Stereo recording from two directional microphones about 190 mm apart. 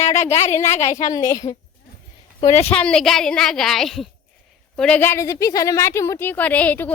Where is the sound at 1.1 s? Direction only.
20° left (ahead or behind).